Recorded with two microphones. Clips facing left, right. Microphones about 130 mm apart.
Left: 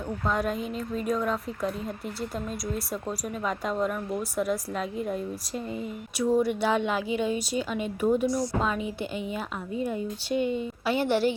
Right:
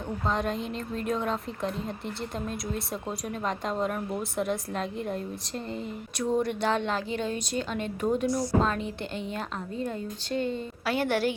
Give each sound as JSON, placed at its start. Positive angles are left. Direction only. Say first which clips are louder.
{"t": 0.3, "sound": "a woman's voice", "louder": "left 1 dB", "side_deg": 5}
{"t": 10.9, "sound": "a woman's voice", "louder": "left 2 dB", "side_deg": -45}